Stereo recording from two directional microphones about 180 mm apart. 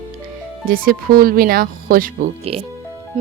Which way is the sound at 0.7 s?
55° right (ahead or behind).